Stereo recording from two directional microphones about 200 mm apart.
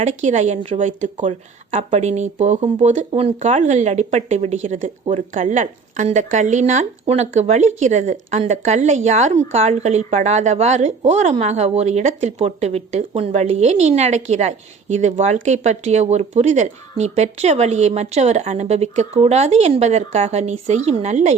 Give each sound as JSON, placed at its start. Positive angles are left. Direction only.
{"t": 0.0, "sound": "a woman's voice", "side_deg": -35}